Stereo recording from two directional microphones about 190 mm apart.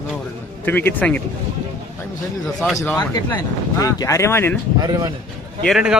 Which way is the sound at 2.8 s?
15° left (ahead or behind).